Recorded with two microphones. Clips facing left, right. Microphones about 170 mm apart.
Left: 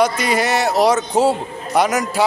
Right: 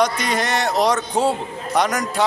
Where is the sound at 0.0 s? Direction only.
5° left (ahead or behind).